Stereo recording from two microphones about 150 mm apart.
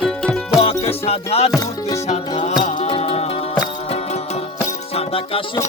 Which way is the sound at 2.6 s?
55° left (ahead or behind).